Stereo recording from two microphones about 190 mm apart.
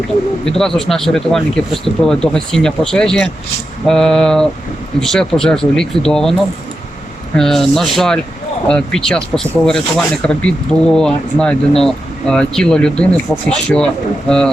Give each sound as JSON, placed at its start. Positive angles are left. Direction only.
{"t": 0.4, "sound": "speech", "side_deg": 5}
{"t": 7.3, "sound": "speech", "side_deg": 0}